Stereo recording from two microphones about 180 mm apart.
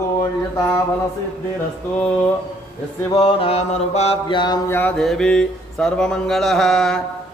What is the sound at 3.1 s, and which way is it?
Mantra, 25° left (ahead or behind).